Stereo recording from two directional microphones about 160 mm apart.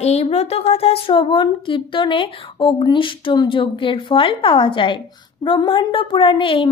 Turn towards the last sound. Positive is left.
turn(degrees=30)  # may be behind; listen again after turning